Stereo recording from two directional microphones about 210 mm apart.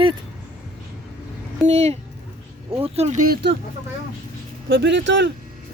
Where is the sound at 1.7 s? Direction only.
30° right (ahead or behind).